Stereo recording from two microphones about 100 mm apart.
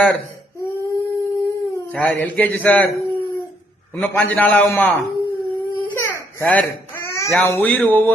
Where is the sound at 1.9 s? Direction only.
15° left (ahead or behind).